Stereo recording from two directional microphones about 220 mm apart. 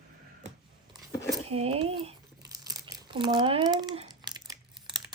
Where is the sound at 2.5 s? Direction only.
15° right (ahead or behind).